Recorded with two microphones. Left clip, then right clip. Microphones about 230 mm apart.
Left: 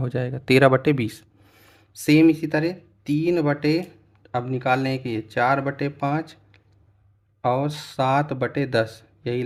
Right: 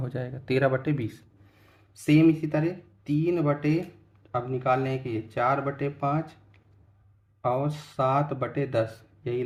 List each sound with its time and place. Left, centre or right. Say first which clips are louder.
0.0 s speech: left 7 dB; left